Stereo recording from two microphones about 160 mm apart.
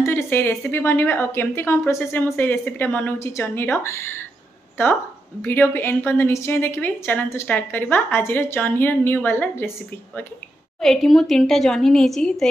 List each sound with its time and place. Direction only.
0.0 s a woman's voice: 15° left (ahead or behind)
5.4 s a woman's voice: 10° left (ahead or behind)
10.8 s a woman's voice: centre (ahead or behind)